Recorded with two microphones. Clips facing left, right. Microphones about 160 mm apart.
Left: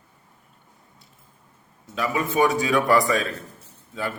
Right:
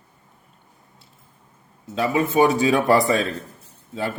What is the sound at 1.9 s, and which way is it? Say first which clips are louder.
Speech: right 4 dB; 25° right (ahead or behind).